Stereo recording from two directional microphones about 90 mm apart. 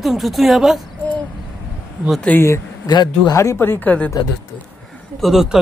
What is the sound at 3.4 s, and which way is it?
Speech, 30° left (ahead or behind).